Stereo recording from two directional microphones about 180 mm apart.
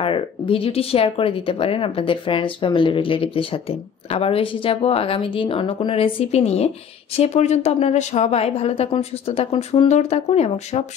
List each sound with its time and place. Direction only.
0.0 s speech: 30° left (ahead or behind)